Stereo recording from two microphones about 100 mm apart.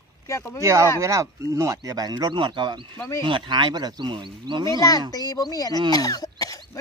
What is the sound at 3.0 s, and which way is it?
Speech, 30° left (ahead or behind).